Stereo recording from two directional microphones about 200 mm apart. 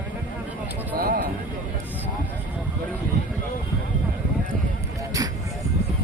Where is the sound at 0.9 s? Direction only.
45° right (ahead or behind).